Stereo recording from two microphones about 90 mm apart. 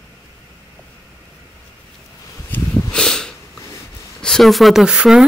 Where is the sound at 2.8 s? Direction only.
5° left (ahead or behind).